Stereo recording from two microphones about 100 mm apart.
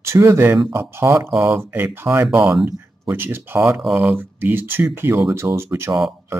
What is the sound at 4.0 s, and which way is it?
Speech, 20° right (ahead or behind).